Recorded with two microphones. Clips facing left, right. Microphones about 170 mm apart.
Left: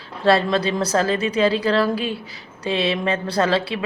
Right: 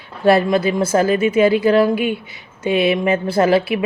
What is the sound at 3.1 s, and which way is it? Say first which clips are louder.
Speech: right 5 dB; 25° right (ahead or behind).